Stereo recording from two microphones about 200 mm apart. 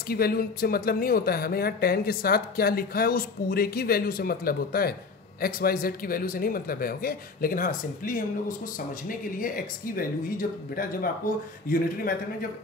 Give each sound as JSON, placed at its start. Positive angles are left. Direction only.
{"t": 0.1, "sound": "speech", "side_deg": 50}
{"t": 9.9, "sound": "speech", "side_deg": 45}